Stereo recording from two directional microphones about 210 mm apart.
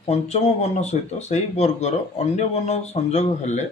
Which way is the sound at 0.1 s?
30° left (ahead or behind).